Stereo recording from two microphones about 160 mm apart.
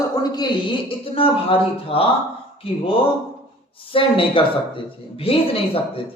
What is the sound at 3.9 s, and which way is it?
Speech, 35° left (ahead or behind).